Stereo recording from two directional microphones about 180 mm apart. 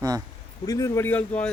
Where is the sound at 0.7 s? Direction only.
15° left (ahead or behind).